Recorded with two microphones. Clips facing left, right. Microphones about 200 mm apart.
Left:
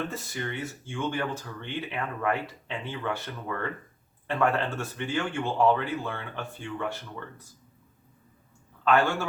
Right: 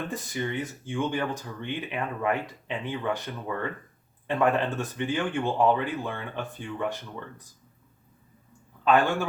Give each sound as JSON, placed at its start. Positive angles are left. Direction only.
{"t": 0.1, "sound": "speech", "side_deg": -15}
{"t": 8.8, "sound": "a man's voice", "side_deg": -15}